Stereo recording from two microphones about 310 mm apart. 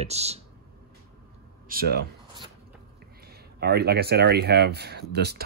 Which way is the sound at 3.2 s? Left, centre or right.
Right.